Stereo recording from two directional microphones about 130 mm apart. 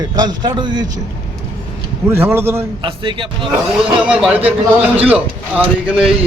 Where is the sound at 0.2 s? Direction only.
35° right (ahead or behind).